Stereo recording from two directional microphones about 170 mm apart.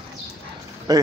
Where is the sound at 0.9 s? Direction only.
20° right (ahead or behind).